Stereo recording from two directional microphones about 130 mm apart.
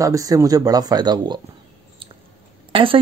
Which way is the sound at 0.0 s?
25° right (ahead or behind).